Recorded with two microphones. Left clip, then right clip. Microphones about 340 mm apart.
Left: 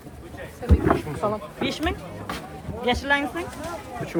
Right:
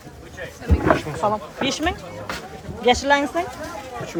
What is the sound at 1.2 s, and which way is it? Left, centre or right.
Speech, centre.